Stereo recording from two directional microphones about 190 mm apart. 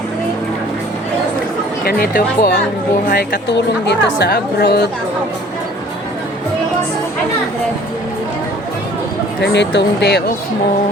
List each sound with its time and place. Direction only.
1.8 s a woman's voice: 50° left (ahead or behind)
9.4 s a woman's voice: 65° left (ahead or behind)